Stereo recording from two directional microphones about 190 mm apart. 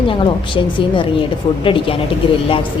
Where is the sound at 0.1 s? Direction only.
25° left (ahead or behind).